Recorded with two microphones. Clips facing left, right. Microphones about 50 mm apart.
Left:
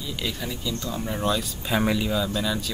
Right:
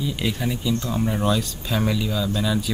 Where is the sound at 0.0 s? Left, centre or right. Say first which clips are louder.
Right 6 dB; centre.